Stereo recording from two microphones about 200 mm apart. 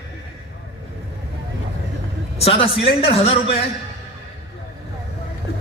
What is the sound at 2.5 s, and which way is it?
A man's voice, 25° left (ahead or behind).